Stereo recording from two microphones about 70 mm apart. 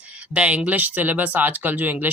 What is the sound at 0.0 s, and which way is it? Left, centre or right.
Speech, centre.